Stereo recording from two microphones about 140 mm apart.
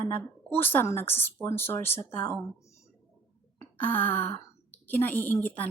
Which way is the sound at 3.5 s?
15° left (ahead or behind).